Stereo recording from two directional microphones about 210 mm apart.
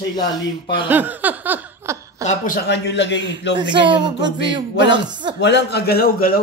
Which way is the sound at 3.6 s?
20° right (ahead or behind).